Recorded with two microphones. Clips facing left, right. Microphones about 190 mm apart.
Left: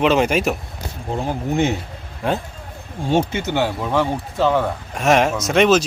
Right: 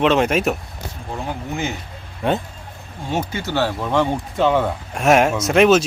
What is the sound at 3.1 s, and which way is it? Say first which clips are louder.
Speech: left 4 dB; 25° left (ahead or behind).